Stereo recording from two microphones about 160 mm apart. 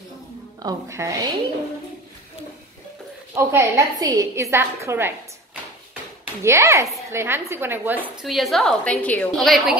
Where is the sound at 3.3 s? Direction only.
20° right (ahead or behind).